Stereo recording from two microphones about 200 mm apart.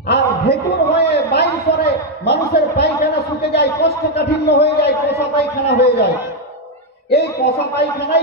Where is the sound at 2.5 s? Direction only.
55° left (ahead or behind).